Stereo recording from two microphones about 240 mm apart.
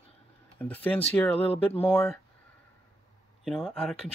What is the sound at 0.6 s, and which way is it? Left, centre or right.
Speech, centre.